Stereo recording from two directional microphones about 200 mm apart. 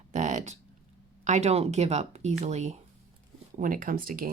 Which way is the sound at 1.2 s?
35° right (ahead or behind).